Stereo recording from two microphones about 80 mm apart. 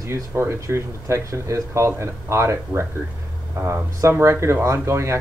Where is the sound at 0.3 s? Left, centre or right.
Right.